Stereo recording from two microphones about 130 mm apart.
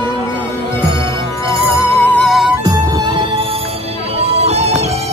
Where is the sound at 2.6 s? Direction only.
30° right (ahead or behind).